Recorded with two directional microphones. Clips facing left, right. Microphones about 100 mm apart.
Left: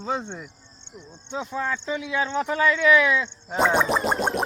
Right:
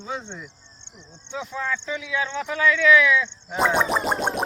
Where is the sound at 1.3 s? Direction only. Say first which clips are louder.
Left 1 dB; 40° left (ahead or behind).